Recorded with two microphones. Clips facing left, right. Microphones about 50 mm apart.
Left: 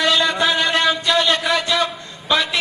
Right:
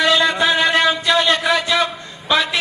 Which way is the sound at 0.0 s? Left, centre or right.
Right.